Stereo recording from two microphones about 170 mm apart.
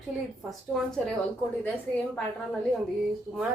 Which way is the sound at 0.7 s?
5° left (ahead or behind).